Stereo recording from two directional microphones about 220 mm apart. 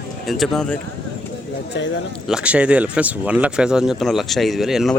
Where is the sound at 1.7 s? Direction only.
55° left (ahead or behind).